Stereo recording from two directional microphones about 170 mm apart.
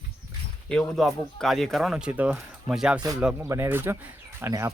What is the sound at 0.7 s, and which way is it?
Speech, centre (ahead or behind).